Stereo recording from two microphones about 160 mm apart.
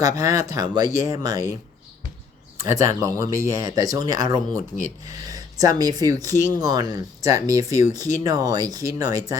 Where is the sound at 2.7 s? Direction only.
20° right (ahead or behind).